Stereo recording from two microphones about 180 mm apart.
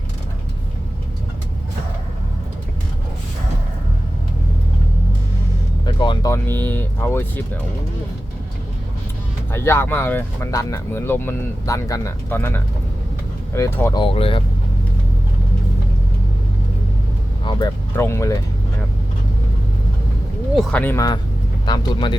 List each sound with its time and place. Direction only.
5.8 s music: 25° left (ahead or behind)
6.3 s speech: 10° left (ahead or behind)
9.5 s speech: 15° left (ahead or behind)
14.0 s speech: 30° left (ahead or behind)
17.9 s speech: 15° left (ahead or behind)
20.6 s speech: 5° left (ahead or behind); by 22.1 s 20° left (ahead or behind)